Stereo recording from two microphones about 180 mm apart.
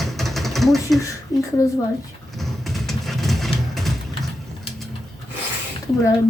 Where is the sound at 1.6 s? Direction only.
20° left (ahead or behind).